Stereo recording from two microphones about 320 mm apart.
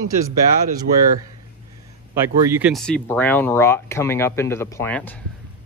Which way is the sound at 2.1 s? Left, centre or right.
Centre.